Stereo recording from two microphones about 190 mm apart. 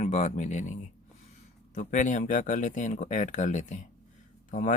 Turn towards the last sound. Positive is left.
turn(degrees=40)  # may be behind; listen again after turning